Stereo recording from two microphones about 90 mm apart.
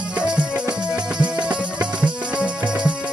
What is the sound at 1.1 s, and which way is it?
Music, 15° right (ahead or behind).